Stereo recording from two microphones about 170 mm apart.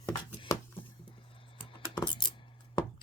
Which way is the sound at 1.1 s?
30° left (ahead or behind).